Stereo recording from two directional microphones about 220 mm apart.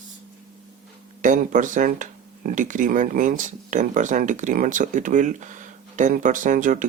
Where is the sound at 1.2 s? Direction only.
35° right (ahead or behind).